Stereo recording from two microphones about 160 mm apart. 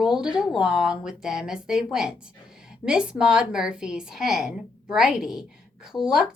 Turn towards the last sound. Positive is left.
turn(degrees=-5)  # may be behind; listen again after turning